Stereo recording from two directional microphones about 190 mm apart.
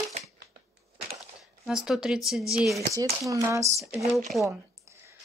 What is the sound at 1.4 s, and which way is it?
Speech, centre (ahead or behind).